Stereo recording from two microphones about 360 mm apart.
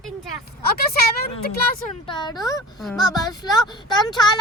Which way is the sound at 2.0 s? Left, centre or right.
Centre.